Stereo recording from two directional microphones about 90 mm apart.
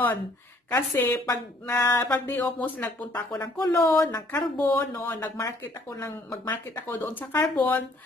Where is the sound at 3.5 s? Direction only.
30° left (ahead or behind).